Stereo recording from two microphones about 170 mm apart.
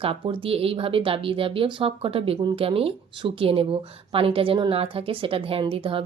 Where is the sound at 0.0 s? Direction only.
30° right (ahead or behind).